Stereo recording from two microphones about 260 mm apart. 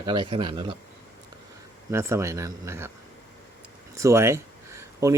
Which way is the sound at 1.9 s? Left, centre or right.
Centre.